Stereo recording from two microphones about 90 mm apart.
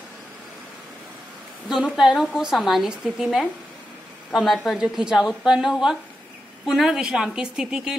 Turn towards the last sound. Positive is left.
turn(degrees=-10)  # may be behind; listen again after turning